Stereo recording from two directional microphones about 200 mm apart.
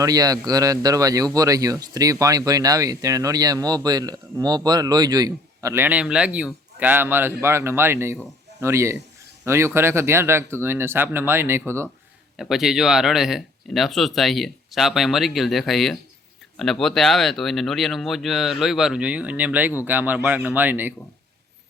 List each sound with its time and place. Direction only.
0.0 s a man's voice: 20° right (ahead or behind)
12.4 s a man's voice: centre (ahead or behind)